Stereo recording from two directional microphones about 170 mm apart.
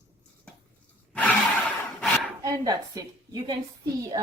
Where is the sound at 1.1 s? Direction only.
10° left (ahead or behind).